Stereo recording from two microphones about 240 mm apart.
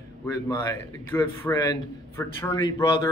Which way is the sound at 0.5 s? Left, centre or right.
Centre.